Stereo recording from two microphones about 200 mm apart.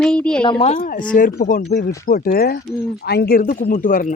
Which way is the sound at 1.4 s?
40° left (ahead or behind).